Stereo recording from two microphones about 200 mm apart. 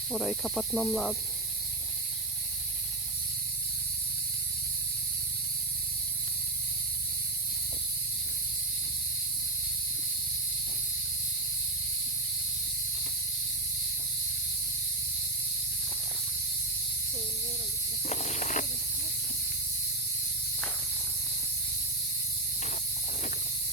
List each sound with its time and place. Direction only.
0.1 s speech: centre (ahead or behind)
18.1 s snake: 35° left (ahead or behind)